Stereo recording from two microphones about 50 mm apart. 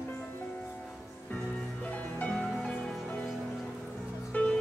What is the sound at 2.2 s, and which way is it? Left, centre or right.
Music, left.